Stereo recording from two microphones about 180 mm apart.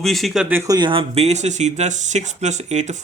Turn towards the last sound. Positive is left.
turn(degrees=-40)  # may be behind; listen again after turning